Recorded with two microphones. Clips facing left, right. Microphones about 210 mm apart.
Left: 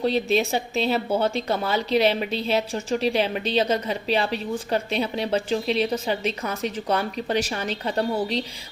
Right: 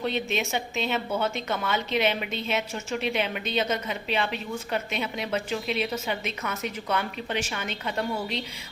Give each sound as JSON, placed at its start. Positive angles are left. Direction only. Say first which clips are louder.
{"t": 0.0, "sound": "a woman's voice", "louder": "left 6 dB", "side_deg": 35}